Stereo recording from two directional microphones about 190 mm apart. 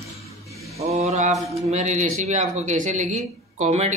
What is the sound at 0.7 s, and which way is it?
Mantra, 35° right (ahead or behind).